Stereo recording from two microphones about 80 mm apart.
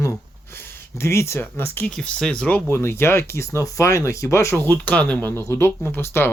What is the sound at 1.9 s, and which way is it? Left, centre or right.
Speech, centre.